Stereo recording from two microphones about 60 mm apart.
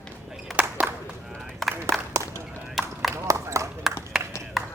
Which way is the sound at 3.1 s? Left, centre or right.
Right.